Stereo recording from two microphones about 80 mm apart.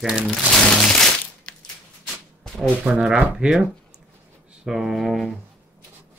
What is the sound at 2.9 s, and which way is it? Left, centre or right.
Speech, centre.